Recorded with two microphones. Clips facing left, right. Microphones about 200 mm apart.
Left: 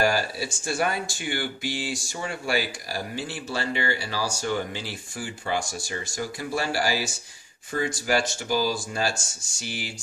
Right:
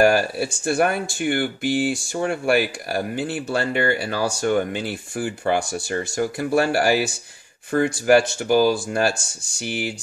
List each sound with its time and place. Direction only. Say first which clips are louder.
0.0 s speech: right 7 dB; 60° right (ahead or behind)